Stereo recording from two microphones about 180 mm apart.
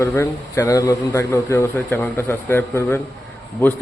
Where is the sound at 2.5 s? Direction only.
10° left (ahead or behind).